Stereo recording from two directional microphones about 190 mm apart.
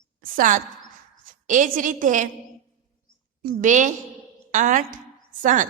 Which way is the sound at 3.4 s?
40° right (ahead or behind).